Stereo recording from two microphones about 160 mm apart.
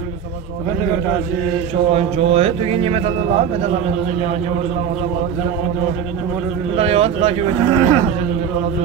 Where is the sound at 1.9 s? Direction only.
40° right (ahead or behind).